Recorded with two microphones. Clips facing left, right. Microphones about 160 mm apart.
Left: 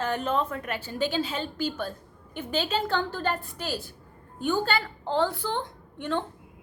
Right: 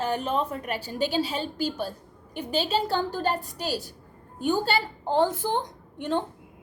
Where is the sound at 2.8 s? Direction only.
40° right (ahead or behind).